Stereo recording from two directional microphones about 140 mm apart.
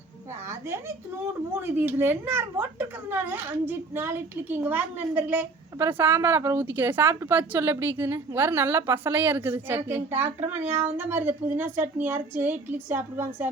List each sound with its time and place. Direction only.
1.7 s a child's voice: 15° right (ahead or behind)